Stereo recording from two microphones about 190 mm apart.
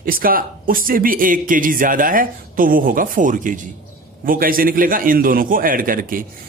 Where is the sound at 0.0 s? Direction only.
50° right (ahead or behind).